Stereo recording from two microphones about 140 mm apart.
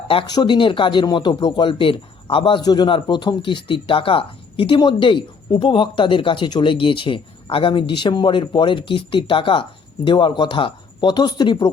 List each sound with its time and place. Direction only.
0.1 s speech: 35° left (ahead or behind)